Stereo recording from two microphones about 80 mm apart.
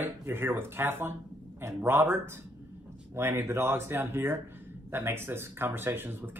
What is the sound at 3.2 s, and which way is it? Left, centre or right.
Speech, right.